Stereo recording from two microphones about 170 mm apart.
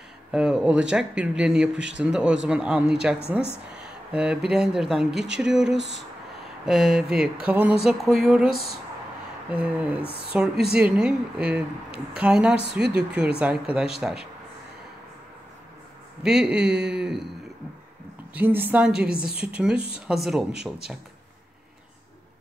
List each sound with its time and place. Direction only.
0.3 s speech: 5° right (ahead or behind)
5.8 s speech: 90° right
6.6 s a woman's voice: centre (ahead or behind)
16.2 s speech: 5° right (ahead or behind)
18.3 s a woman's voice: 10° right (ahead or behind)